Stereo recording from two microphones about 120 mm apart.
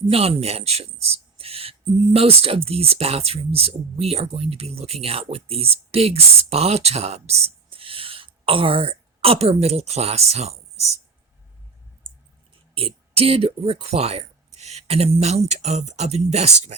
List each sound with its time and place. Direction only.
0.1 s a man's voice: 55° right (ahead or behind)
12.7 s speech: 50° right (ahead or behind); by 16.7 s 70° right (ahead or behind)